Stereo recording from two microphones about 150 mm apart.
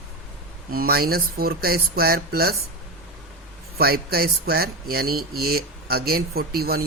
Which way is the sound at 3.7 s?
90° right.